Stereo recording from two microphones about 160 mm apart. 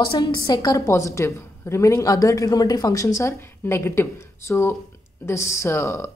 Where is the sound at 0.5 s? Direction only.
25° left (ahead or behind).